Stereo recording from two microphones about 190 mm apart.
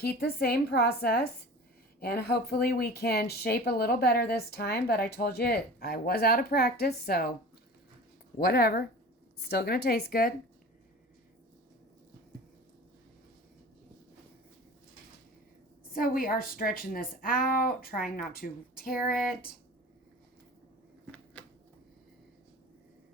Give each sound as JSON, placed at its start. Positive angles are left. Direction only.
{"t": 0.0, "sound": "a woman's voice", "side_deg": 55}
{"t": 8.4, "sound": "speech", "side_deg": 55}
{"t": 15.9, "sound": "a woman's voice", "side_deg": 50}